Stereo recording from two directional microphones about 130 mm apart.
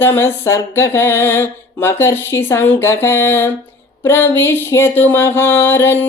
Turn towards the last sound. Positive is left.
turn(degrees=15)  # may be behind; listen again after turning